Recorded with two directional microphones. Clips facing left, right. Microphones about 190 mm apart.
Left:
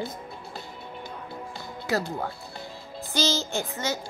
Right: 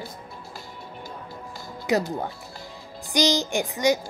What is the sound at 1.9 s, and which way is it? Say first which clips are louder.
A woman's voice: right 4 dB; 20° right (ahead or behind).